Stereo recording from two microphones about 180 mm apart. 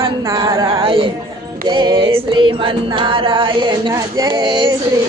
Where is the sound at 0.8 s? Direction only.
30° right (ahead or behind).